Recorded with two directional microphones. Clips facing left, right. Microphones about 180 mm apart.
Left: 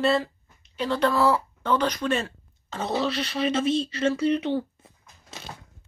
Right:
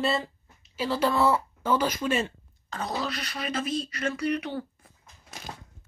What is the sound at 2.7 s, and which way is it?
Speech, 25° left (ahead or behind).